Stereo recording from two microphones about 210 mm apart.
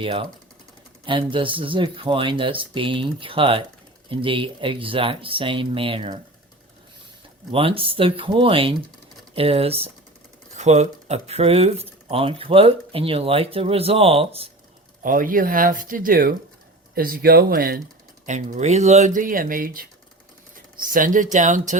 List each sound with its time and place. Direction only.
0.0 s speech: 25° right (ahead or behind)
7.5 s speech: 25° right (ahead or behind)
15.0 s speech: 40° right (ahead or behind)